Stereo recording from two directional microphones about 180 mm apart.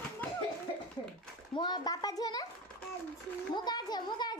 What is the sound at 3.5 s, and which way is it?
Speech, 25° left (ahead or behind).